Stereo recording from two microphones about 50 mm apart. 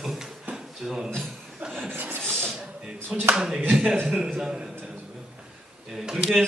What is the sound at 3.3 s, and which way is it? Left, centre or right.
A man's voice, centre.